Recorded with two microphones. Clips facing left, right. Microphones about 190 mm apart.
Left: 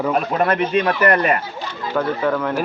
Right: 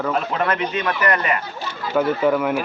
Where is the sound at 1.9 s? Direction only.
10° right (ahead or behind).